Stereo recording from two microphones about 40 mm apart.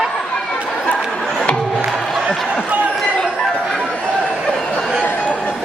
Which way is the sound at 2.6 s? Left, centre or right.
Right.